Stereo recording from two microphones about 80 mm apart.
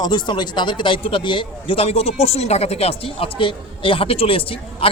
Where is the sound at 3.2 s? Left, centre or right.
Left.